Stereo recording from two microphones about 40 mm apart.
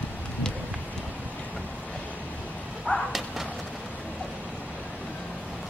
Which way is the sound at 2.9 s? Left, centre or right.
Left.